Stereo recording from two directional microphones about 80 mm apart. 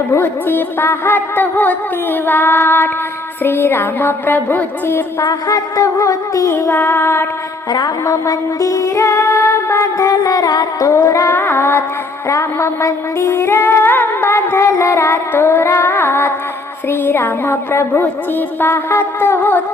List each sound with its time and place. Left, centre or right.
0.1 s music: left
5.2 s music: left
6.5 s female singing: left
7.7 s music: left
10.9 s a sound: left
12.3 s music: left